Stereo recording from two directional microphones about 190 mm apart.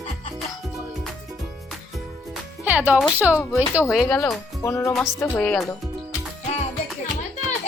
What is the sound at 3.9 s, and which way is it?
Speech, centre (ahead or behind).